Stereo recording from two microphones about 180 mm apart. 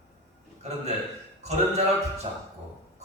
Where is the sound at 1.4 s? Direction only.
35° right (ahead or behind).